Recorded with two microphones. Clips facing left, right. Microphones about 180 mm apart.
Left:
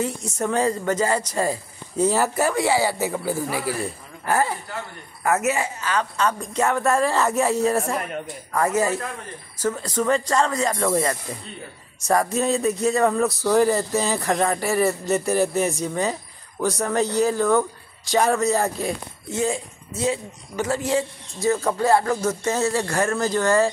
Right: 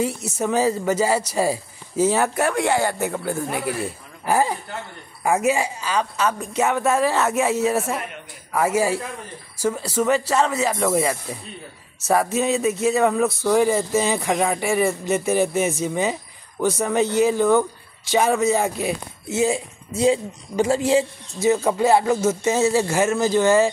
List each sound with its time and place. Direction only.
0.0 s speech: 10° right (ahead or behind)
4.3 s a man's voice: 15° right (ahead or behind)
21.5 s a man's voice: 15° right (ahead or behind)
22.7 s speech: 5° right (ahead or behind)
23.4 s speech: 25° right (ahead or behind)